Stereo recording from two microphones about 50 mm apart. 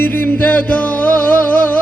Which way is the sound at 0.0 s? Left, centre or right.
Left.